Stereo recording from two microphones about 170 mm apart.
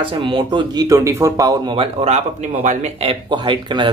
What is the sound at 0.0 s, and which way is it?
Speech, 30° right (ahead or behind).